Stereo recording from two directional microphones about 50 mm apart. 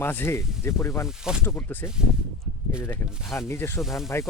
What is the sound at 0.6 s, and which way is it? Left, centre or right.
Speech, left.